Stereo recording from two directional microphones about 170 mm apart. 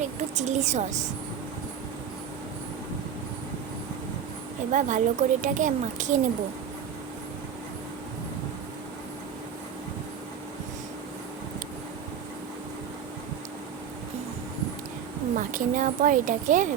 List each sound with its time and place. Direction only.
0.0 s a woman's voice: 45° right (ahead or behind)
4.7 s a woman's voice: 50° right (ahead or behind)
15.4 s a woman's voice: 50° right (ahead or behind)